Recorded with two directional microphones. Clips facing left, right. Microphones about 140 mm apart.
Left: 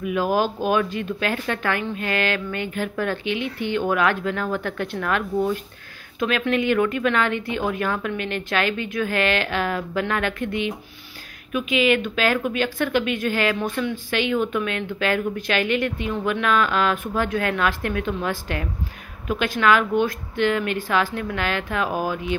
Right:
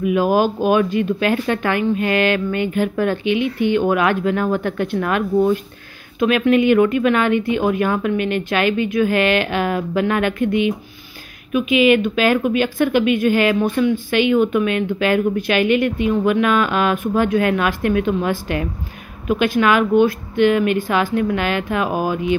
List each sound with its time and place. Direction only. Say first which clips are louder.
0.0 s speech: right 5 dB; 15° right (ahead or behind)